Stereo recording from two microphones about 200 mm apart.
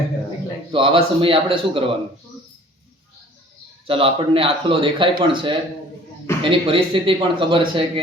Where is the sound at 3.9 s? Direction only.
25° right (ahead or behind).